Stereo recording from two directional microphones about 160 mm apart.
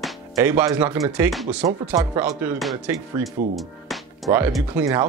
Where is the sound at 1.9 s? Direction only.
20° right (ahead or behind).